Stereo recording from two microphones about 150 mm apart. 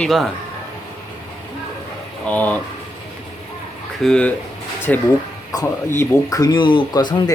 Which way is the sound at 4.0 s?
5° left (ahead or behind).